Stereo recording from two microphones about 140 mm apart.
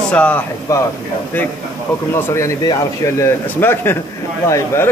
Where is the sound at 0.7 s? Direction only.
20° left (ahead or behind).